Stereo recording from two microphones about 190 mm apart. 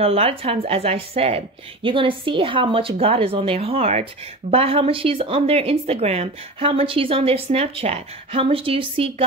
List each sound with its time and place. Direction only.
0.0 s speech: 30° right (ahead or behind)